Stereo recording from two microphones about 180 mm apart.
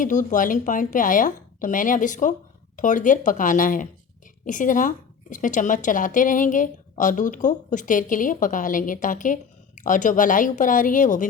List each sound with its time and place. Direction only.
0.0 s speech: 45° left (ahead or behind)